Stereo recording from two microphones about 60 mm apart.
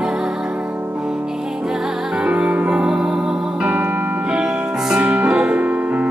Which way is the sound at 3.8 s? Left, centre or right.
Right.